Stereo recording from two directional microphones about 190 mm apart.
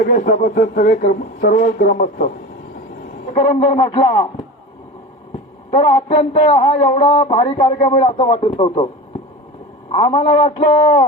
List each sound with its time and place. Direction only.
0.0 s speech: 50° left (ahead or behind)
3.3 s speech: 30° left (ahead or behind)
5.7 s speech: 30° left (ahead or behind)
9.9 s speech: 25° left (ahead or behind)